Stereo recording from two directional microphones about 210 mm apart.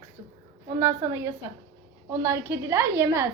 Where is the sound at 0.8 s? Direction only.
15° right (ahead or behind).